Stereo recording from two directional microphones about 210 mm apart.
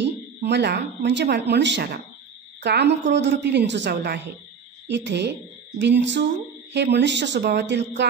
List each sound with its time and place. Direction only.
0.0 s a woman's voice: 55° right (ahead or behind)